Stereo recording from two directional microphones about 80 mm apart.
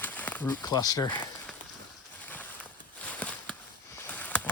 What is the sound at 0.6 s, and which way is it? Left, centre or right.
Speech, left.